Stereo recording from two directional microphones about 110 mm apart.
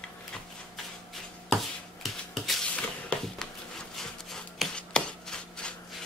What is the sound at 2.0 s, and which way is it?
Rub, centre (ahead or behind).